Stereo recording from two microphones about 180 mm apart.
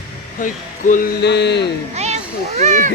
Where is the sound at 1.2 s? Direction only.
70° left (ahead or behind).